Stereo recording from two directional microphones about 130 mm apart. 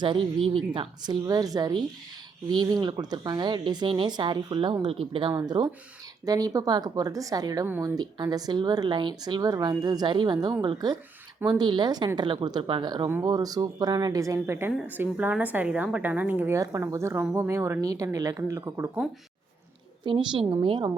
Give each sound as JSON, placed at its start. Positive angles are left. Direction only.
{"t": 0.0, "sound": "speech", "side_deg": -40}
{"t": 5.3, "sound": "a woman's voice", "side_deg": -30}
{"t": 20.1, "sound": "speech", "side_deg": -35}